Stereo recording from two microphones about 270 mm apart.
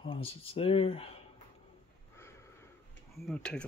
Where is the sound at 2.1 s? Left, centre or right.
Centre.